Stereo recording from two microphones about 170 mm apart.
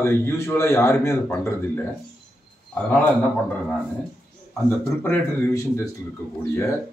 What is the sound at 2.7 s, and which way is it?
Speech, 10° left (ahead or behind).